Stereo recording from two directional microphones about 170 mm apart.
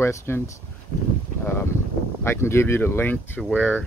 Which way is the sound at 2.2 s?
15° left (ahead or behind).